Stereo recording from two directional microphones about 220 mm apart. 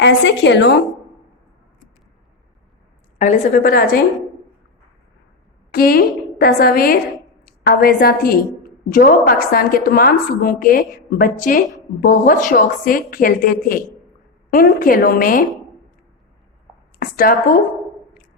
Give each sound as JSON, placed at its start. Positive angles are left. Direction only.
{"t": 0.0, "sound": "a woman's voice", "side_deg": 55}
{"t": 3.2, "sound": "a woman's voice", "side_deg": 35}
{"t": 5.7, "sound": "a woman's voice", "side_deg": 45}
{"t": 17.0, "sound": "a woman's voice", "side_deg": 40}